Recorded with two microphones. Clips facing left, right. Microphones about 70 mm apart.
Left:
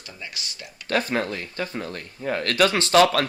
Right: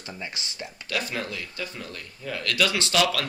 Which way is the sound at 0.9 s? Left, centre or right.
Left.